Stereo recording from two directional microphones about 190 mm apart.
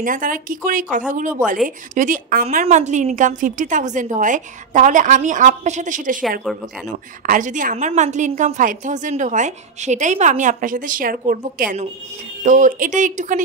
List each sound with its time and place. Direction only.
0.0 s a woman's voice: 45° right (ahead or behind)
7.2 s a woman's voice: 45° right (ahead or behind)